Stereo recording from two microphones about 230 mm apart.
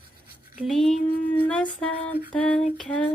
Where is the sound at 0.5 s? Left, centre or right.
Centre.